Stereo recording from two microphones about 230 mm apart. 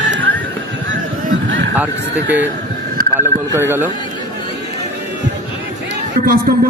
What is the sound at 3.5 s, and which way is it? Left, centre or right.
Speech, centre.